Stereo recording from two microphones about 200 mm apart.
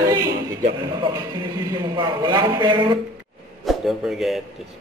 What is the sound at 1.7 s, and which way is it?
A man's voice, 20° right (ahead or behind).